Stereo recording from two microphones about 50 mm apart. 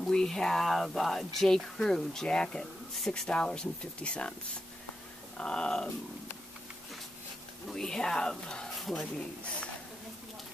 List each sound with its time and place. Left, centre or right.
0.0 s speech: centre; by 4.4 s left
5.4 s speech: centre
7.7 s speech: centre
8.7 s a sound: centre